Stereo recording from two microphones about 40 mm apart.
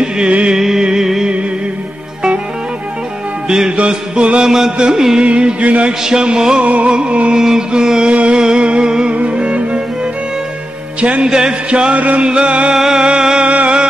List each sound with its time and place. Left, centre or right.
0.0 s music: right
0.6 s a sound: centre
3.4 s music: centre
3.7 s music: right
6.0 s music: centre
6.6 s music: right
7.3 s music: centre
8.1 s music: right
11.0 s music: right
11.2 s music: right
12.7 s music: centre
13.5 s music: right